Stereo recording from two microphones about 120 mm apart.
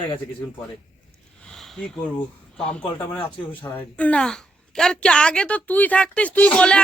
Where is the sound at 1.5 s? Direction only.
5° left (ahead or behind).